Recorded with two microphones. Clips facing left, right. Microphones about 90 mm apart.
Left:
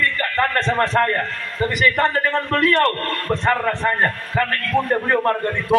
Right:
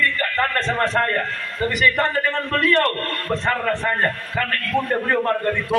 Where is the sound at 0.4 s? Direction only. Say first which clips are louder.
Left 3 dB; 25° left (ahead or behind).